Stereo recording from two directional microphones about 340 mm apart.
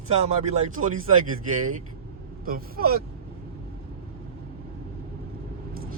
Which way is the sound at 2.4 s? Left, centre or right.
Right.